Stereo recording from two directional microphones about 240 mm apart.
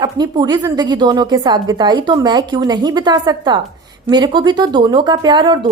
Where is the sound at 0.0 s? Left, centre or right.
Centre.